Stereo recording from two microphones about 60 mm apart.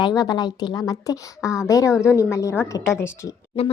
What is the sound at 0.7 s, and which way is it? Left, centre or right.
A woman's voice, left.